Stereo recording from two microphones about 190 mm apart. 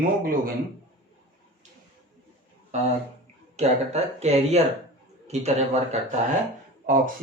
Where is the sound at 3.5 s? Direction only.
35° right (ahead or behind).